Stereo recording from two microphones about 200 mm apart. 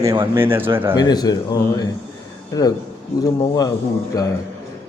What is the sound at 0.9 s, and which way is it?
A man's voice, 20° left (ahead or behind).